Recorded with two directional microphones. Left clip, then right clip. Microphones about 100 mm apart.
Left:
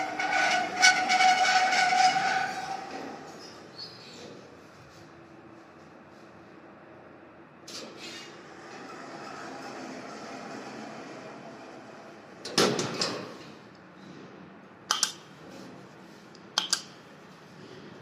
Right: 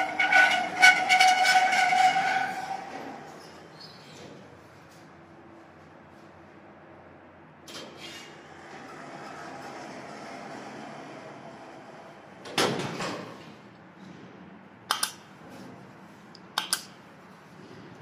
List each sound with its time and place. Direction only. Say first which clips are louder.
0.0 s train: right 6 dB; 30° left (ahead or behind)
7.6 s rub: even; 35° left (ahead or behind)
8.6 s train: even; 30° left (ahead or behind)
12.4 s door: left 1 dB; 35° left (ahead or behind)